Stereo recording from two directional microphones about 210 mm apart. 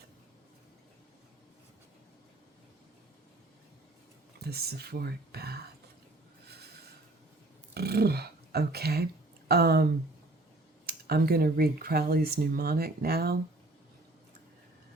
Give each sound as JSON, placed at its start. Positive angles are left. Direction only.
{"t": 4.4, "sound": "speech", "side_deg": -50}
{"t": 7.7, "sound": "speech", "side_deg": -50}
{"t": 10.8, "sound": "speech", "side_deg": -50}